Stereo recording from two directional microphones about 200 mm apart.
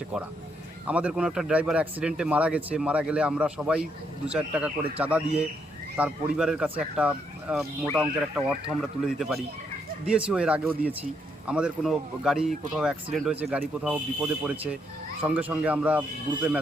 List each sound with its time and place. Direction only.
0.9 s speech: 5° right (ahead or behind)